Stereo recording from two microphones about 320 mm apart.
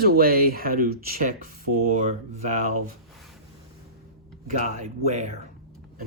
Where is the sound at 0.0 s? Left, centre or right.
Right.